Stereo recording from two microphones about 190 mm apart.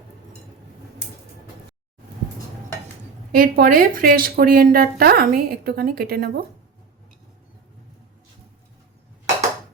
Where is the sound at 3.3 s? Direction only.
50° right (ahead or behind).